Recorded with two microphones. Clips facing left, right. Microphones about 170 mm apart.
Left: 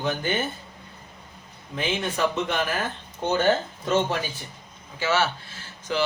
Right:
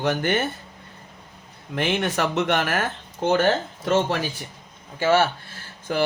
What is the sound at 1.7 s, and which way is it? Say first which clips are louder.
Speech: right 4 dB; 65° right (ahead or behind).